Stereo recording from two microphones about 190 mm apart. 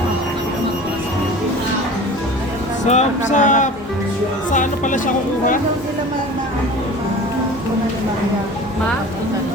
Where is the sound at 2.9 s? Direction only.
40° left (ahead or behind).